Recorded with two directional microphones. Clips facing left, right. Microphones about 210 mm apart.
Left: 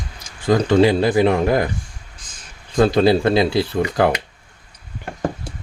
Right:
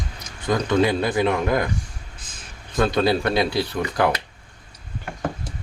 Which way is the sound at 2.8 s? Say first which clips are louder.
Left 5 dB; 30° left (ahead or behind).